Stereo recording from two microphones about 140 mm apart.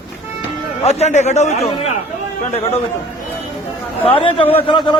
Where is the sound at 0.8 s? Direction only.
55° left (ahead or behind).